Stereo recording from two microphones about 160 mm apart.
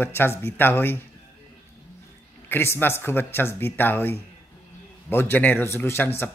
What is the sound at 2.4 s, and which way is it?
Speech, 15° left (ahead or behind).